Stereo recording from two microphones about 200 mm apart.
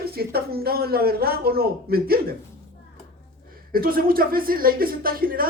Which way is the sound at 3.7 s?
45° right (ahead or behind).